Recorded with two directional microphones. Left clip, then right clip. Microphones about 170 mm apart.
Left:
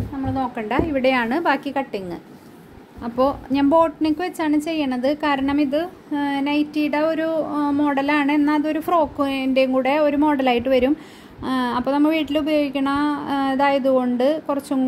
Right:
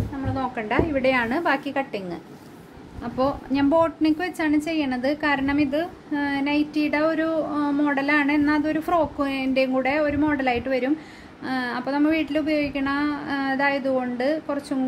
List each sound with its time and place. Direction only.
0.3 s a woman's voice: 40° left (ahead or behind)